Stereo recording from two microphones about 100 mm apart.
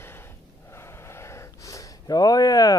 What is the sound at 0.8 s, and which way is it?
Speech, 25° left (ahead or behind).